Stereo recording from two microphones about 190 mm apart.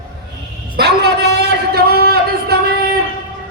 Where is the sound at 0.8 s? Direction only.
60° right (ahead or behind).